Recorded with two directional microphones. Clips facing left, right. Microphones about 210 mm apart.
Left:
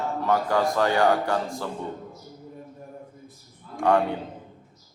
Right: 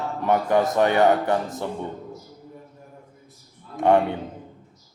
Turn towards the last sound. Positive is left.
turn(degrees=-20)  # may be behind; listen again after turning